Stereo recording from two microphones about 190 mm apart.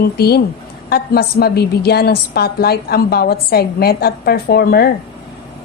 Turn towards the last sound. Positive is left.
turn(degrees=55)  # may be behind; listen again after turning